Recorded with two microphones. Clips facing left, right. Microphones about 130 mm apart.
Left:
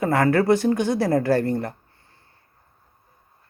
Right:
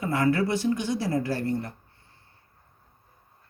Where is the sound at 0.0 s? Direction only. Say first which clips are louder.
Left 5 dB; 60° left (ahead or behind).